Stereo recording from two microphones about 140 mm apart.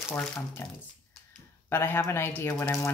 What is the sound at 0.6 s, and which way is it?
Speech, 20° left (ahead or behind).